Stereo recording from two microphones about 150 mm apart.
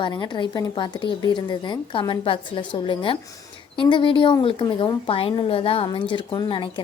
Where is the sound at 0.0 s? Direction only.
30° left (ahead or behind).